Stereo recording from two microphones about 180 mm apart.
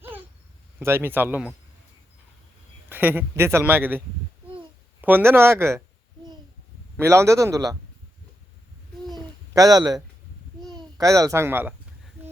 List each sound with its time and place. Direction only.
0.8 s speech: 15° right (ahead or behind)
2.9 s speech: 10° right (ahead or behind)
7.0 s speech: 15° right (ahead or behind)
9.1 s a sound: 20° right (ahead or behind)
10.8 s a child's voice: 20° right (ahead or behind)